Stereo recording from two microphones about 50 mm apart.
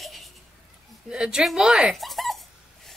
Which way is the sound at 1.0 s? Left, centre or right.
Centre.